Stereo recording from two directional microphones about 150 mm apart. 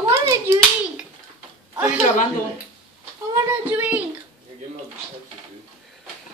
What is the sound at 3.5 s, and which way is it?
Speech, 10° right (ahead or behind).